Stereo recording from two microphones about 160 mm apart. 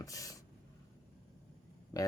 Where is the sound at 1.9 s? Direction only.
20° left (ahead or behind).